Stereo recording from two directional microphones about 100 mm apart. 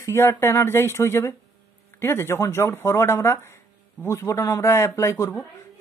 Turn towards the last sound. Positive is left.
turn(degrees=30)  # may be behind; listen again after turning